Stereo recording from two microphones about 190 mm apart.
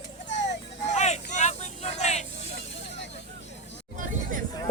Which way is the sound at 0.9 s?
35° left (ahead or behind).